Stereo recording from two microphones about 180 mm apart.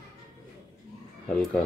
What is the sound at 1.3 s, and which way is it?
Speech, 5° left (ahead or behind).